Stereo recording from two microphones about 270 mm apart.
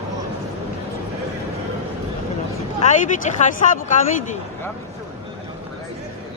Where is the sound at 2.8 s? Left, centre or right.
Left.